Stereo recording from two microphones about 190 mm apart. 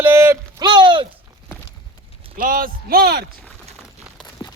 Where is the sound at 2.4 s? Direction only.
50° right (ahead or behind).